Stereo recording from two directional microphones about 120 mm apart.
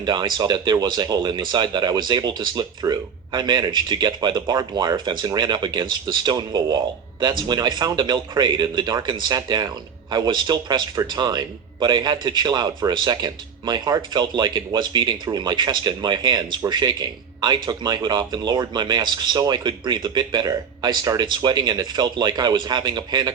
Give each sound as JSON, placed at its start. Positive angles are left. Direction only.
{"t": 0.0, "sound": "speech", "side_deg": -40}